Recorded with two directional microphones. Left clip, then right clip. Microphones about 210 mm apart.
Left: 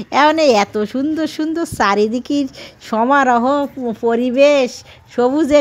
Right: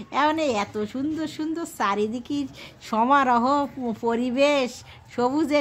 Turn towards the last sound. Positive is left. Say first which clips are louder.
# left 9 dB
turn(degrees=20)  # may be behind; listen again after turning